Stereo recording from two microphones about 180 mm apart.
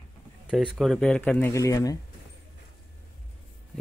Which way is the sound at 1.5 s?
20° left (ahead or behind).